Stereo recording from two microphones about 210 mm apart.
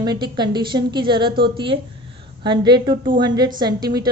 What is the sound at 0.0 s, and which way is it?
A woman's voice, 20° right (ahead or behind).